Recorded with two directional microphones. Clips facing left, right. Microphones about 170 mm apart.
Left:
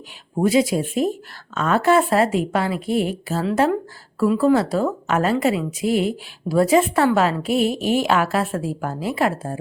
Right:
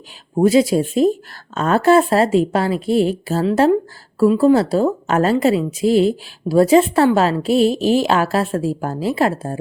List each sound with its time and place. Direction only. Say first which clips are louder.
0.3 s a woman's voice: right 4 dB; 35° right (ahead or behind)